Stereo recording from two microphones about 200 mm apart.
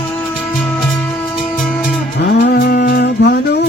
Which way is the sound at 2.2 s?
45° left (ahead or behind).